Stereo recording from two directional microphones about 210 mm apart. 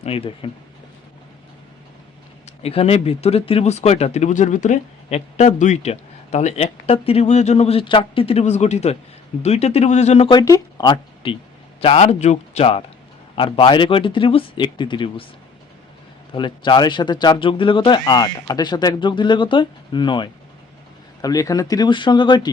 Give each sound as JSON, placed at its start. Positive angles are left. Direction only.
{"t": 0.0, "sound": "speech", "side_deg": 25}
{"t": 2.6, "sound": "speech", "side_deg": 30}
{"t": 16.3, "sound": "speech", "side_deg": 20}